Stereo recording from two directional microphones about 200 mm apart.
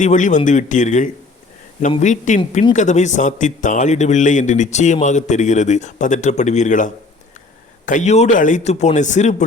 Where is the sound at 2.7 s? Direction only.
35° left (ahead or behind).